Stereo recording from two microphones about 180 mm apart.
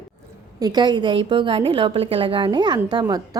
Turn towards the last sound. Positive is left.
turn(degrees=-20)  # may be behind; listen again after turning